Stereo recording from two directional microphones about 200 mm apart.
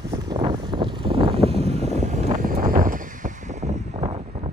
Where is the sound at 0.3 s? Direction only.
25° right (ahead or behind); by 3.0 s 45° right (ahead or behind).